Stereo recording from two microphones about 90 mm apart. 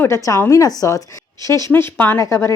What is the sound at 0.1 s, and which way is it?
Speech, 35° left (ahead or behind).